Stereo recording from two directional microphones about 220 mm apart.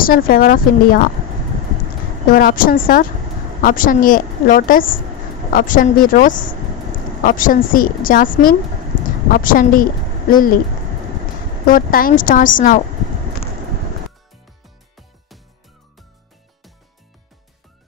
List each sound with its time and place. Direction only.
0.0 s a woman's voice: 40° left (ahead or behind)
2.2 s a woman's voice: 40° left (ahead or behind)
11.6 s a woman's voice: 40° left (ahead or behind)
15.0 s music: centre (ahead or behind)